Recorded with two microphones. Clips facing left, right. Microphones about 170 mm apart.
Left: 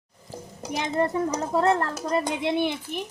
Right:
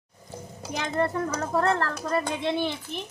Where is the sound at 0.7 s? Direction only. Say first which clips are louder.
Left 2 dB; 20° left (ahead or behind).